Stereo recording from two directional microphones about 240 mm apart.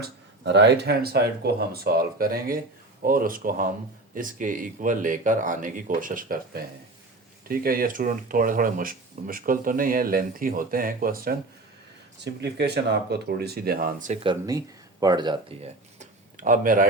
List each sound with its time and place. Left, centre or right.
0.0 s speech: right
14.3 s speech: centre; by 16.8 s right